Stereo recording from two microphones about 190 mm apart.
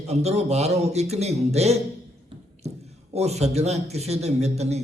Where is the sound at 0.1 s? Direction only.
35° right (ahead or behind).